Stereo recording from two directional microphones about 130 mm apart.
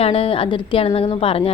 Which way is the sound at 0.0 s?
45° left (ahead or behind).